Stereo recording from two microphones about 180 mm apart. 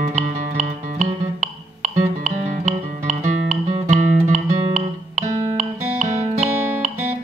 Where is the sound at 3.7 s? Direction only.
45° right (ahead or behind).